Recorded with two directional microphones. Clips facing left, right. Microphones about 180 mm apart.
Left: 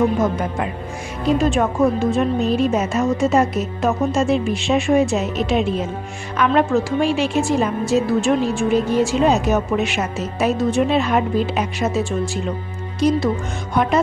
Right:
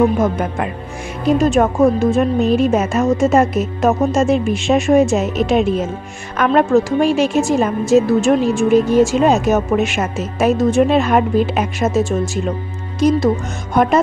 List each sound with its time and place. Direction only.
1.4 s a woman's voice: 45° right (ahead or behind)